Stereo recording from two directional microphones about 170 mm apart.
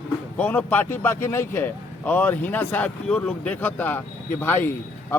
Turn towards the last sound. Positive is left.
turn(degrees=10)  # may be behind; listen again after turning